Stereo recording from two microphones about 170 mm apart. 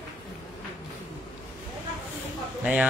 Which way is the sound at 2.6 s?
5° right (ahead or behind).